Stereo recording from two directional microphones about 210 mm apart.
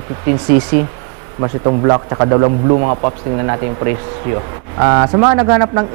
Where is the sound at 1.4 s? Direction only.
25° right (ahead or behind).